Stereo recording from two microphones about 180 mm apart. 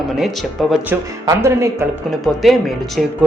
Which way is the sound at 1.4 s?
15° right (ahead or behind).